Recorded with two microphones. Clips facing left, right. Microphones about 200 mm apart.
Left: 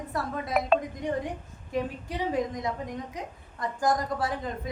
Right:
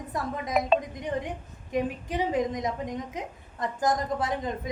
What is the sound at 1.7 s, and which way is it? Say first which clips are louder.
A woman's voice: right 3 dB; 20° right (ahead or behind).